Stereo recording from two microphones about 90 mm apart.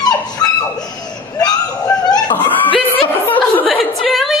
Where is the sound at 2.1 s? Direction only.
50° left (ahead or behind).